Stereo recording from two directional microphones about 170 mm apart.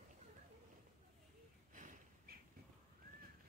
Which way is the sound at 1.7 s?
50° right (ahead or behind).